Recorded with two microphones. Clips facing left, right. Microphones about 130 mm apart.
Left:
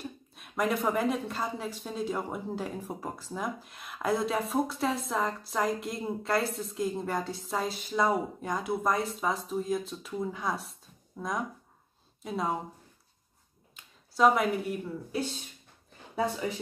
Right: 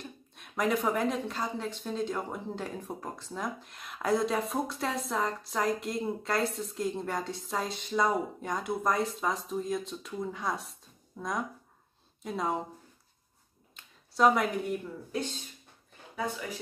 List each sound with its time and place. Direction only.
0.0 s a woman's voice: 5° left (ahead or behind)
14.1 s a woman's voice: centre (ahead or behind)
16.2 s speech: 30° left (ahead or behind)